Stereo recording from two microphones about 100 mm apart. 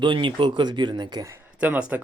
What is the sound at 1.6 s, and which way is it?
Speech, 15° right (ahead or behind).